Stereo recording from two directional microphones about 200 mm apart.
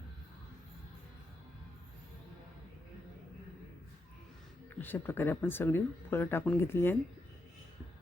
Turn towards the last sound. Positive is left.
turn(degrees=10)  # may be behind; listen again after turning